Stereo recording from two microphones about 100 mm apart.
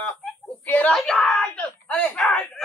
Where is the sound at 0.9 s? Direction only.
5° left (ahead or behind).